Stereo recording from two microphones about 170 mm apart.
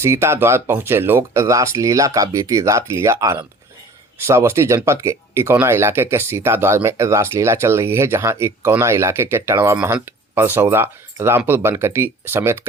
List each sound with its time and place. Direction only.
0.0 s speech: 15° right (ahead or behind)